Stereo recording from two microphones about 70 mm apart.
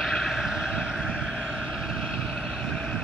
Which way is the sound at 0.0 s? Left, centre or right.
Centre.